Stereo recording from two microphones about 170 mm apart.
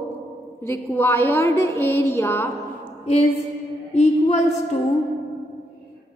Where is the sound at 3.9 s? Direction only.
40° left (ahead or behind).